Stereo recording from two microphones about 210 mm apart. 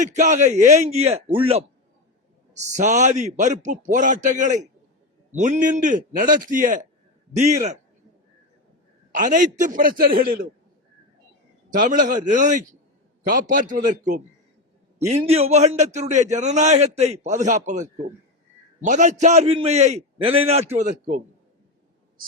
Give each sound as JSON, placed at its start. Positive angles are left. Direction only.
{"t": 0.0, "sound": "a man's voice", "side_deg": -35}
{"t": 9.1, "sound": "a man's voice", "side_deg": -40}
{"t": 11.7, "sound": "a man's voice", "side_deg": -40}